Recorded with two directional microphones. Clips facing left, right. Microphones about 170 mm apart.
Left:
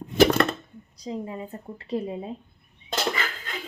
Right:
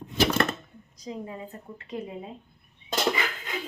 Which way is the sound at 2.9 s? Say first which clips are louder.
Right 1 dB; 20° right (ahead or behind).